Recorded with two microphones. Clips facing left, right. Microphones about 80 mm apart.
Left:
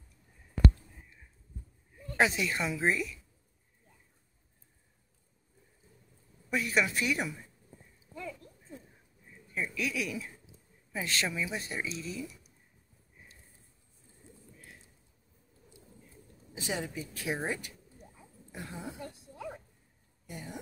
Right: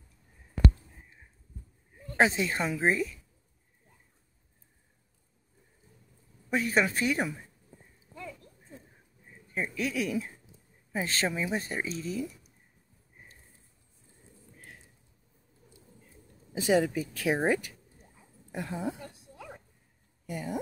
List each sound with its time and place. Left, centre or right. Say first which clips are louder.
2.0 s speech: right 3 dB; right
6.5 s speech: right 3 dB; right
9.5 s speech: right 2 dB; right
16.5 s speech: right 11 dB; right
18.5 s a woman's voice: right 8 dB; right
20.2 s speech: right 8 dB; right